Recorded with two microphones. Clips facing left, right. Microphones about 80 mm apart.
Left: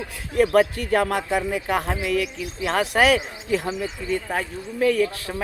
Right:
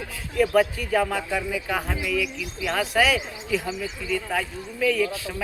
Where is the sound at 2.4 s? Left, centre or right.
Left.